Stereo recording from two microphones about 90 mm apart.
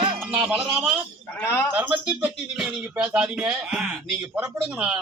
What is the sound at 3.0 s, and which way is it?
Speech, 10° right (ahead or behind).